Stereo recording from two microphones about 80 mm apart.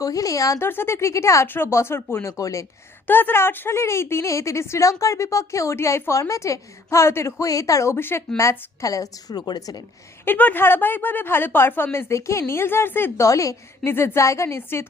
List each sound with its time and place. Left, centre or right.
0.0 s a woman's voice: left
0.6 s speech: left
1.5 s speech: left
3.1 s a woman's voice: left
10.2 s speech: left
13.2 s a woman's voice: left
13.8 s speech: left